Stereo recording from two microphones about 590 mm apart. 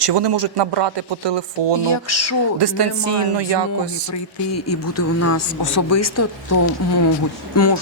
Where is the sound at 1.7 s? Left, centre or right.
Left.